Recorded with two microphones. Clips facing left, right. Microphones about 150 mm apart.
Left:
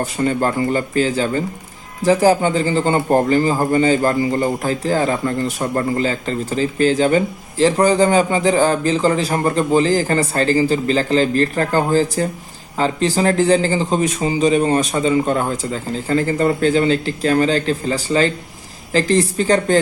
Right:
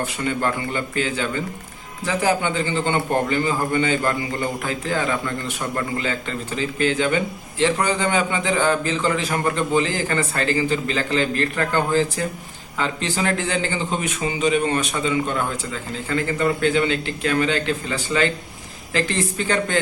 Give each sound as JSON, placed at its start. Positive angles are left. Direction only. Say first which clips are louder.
{"t": 0.0, "sound": "speech", "louder": "left 5 dB", "side_deg": 40}